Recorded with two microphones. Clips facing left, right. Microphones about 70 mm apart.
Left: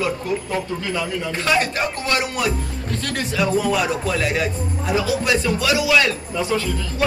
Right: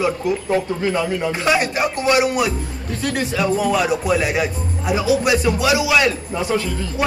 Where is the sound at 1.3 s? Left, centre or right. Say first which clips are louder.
Left 1 dB; centre.